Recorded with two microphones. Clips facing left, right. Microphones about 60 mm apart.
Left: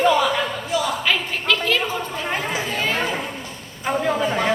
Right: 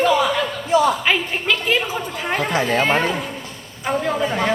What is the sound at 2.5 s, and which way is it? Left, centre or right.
Speech, right.